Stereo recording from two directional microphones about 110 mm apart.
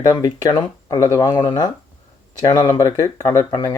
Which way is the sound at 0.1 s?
35° left (ahead or behind).